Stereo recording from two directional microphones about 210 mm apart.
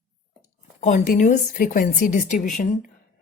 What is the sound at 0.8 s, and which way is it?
A woman's voice, 35° left (ahead or behind).